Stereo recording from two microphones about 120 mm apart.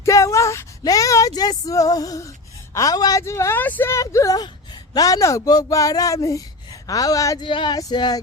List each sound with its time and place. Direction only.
0.0 s speech: 25° left (ahead or behind)
7.4 s speech: 45° left (ahead or behind)